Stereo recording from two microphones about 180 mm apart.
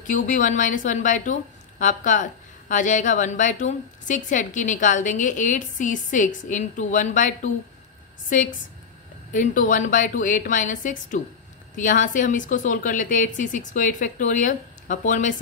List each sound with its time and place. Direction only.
0.0 s a woman's voice: 45° left (ahead or behind)